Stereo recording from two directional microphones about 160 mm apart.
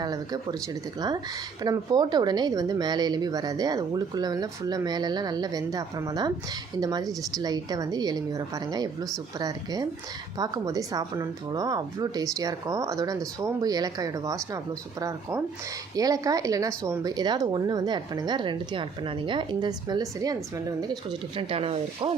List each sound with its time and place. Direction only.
0.0 s speech: 25° right (ahead or behind)